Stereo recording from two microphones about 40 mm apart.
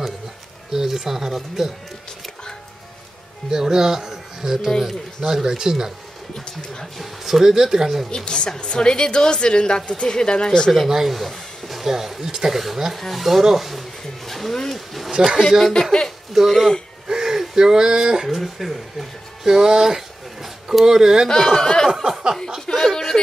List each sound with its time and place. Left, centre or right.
0.7 s speech: centre
3.4 s speech: centre
4.6 s speech: centre
5.3 s speech: centre
6.3 s speech: centre
7.2 s speech: centre
8.3 s a woman's voice: left
10.9 s speech: centre
17.1 s speech: centre
18.4 s speech: centre
19.4 s speech: centre
21.5 s a sound: centre
21.8 s a sound: centre
22.7 s a sound: centre